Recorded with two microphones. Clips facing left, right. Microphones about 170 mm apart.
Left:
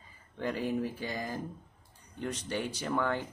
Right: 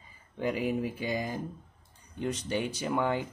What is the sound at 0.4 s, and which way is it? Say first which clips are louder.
Speech: right 2 dB; 15° right (ahead or behind).